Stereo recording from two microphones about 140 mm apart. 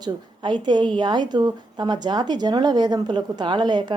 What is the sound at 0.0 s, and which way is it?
A woman's voice, 30° right (ahead or behind).